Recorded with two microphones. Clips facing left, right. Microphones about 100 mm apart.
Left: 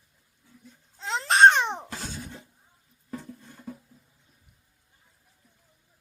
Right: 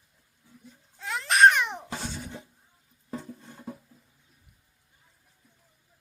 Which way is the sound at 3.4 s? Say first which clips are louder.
Right 1 dB; 15° right (ahead or behind).